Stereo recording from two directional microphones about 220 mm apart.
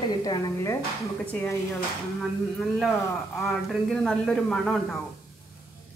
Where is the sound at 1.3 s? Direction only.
10° left (ahead or behind).